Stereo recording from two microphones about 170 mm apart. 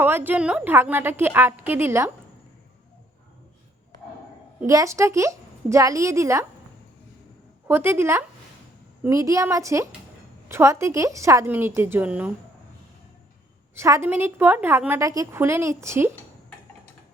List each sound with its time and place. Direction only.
0.0 s a woman's voice: 10° right (ahead or behind)
4.6 s a woman's voice: 20° right (ahead or behind)
7.7 s a woman's voice: 15° right (ahead or behind)
13.7 s a woman's voice: 15° right (ahead or behind)